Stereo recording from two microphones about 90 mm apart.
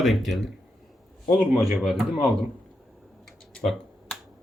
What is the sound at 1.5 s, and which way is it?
Speech, 5° right (ahead or behind).